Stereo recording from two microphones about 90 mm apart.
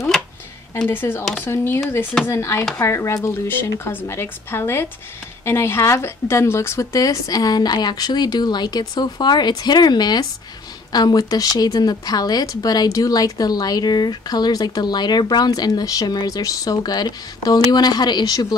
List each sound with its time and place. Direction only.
0.8 s a woman's voice: 25° left (ahead or behind); by 18.6 s 45° left (ahead or behind)